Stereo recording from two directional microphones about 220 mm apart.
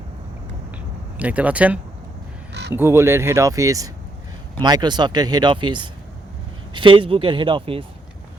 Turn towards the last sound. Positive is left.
turn(degrees=-25)  # may be behind; listen again after turning